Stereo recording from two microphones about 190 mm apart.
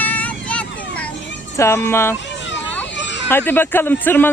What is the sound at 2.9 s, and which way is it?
Children playing, 70° left (ahead or behind).